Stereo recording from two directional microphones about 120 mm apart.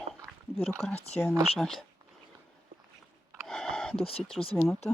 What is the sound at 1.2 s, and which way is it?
Speech, 20° left (ahead or behind).